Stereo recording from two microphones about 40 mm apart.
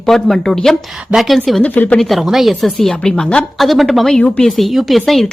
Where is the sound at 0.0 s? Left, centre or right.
Centre.